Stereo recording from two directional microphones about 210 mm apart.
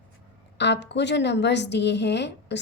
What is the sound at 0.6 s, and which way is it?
A woman's voice, 55° left (ahead or behind).